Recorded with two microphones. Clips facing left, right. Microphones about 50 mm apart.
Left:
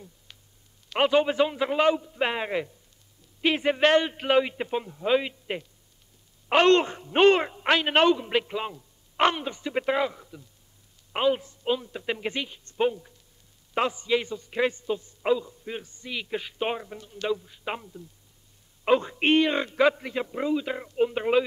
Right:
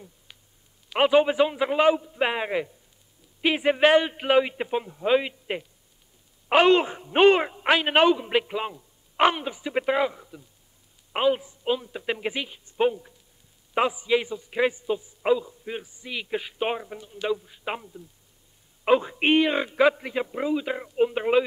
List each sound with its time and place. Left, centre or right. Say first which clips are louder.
0.8 s a man's voice: right 3 dB; centre